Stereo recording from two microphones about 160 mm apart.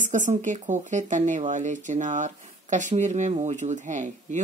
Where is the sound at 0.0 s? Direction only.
50° right (ahead or behind).